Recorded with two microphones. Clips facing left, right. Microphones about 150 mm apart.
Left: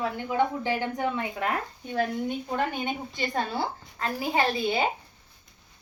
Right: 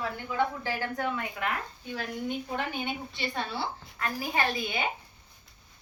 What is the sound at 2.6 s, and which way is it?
A woman's voice, 45° left (ahead or behind).